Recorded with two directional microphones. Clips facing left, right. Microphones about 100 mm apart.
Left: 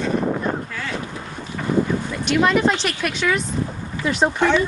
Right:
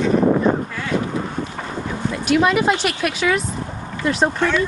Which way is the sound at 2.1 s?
5° right (ahead or behind).